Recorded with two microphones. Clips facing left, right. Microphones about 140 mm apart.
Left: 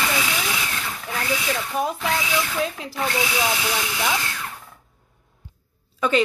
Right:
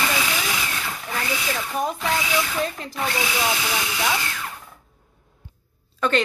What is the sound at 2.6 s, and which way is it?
Speech, 5° left (ahead or behind).